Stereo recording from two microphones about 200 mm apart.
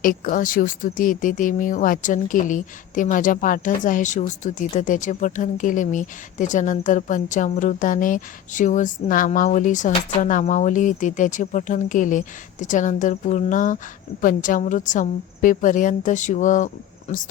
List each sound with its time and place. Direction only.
0.0 s speech: 45° left (ahead or behind)